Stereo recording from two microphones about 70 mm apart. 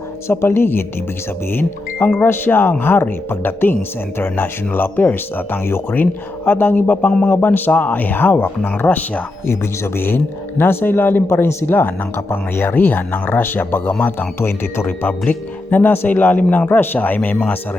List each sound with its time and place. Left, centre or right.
0.3 s speech: left
9.5 s speech: left